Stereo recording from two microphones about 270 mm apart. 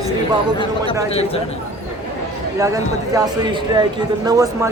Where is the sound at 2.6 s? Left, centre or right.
Centre.